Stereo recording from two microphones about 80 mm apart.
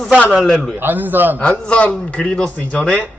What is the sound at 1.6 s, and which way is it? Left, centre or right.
A man's voice, centre.